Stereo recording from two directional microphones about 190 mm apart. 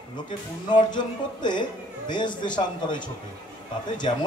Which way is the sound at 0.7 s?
25° left (ahead or behind).